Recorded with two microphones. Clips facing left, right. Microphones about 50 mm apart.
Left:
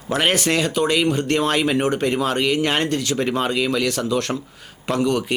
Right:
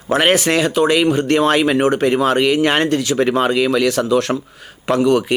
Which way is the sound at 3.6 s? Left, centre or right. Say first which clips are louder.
Right 5 dB; centre.